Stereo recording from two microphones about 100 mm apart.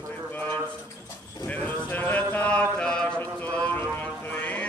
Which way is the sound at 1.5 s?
15° left (ahead or behind).